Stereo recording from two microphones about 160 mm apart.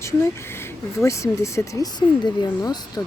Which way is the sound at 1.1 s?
20° left (ahead or behind).